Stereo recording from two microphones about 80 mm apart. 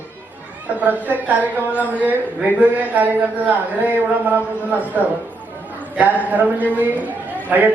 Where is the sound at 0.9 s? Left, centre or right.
Right.